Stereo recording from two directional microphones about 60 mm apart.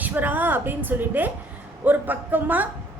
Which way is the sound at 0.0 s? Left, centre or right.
Right.